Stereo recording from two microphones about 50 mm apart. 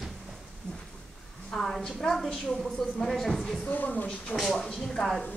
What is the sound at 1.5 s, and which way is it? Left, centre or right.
A woman's voice, centre.